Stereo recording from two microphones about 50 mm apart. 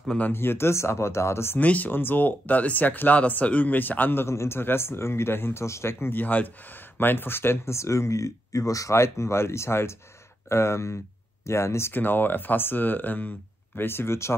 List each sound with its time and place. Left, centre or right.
0.3 s speech: left
1.6 s speech: left
1.9 s speech: left
4.3 s speech: left
6.2 s speech: left
11.9 s speech: left
13.7 s speech: left